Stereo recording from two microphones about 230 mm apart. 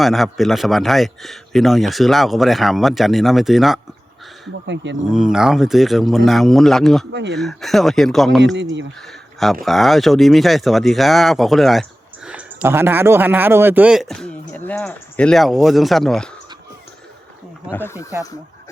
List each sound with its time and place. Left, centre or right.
0.0 s speech: centre
4.6 s speech: right
5.0 s speech: centre
7.1 s speech: right
7.3 s speech: centre
17.7 s speech: centre